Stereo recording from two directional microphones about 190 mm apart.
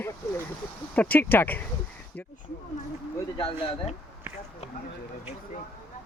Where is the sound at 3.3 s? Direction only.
30° left (ahead or behind).